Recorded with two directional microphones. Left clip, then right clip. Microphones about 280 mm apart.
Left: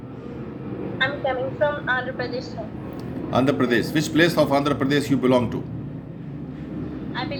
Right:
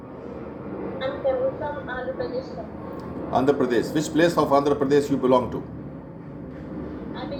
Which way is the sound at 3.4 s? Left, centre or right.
Left.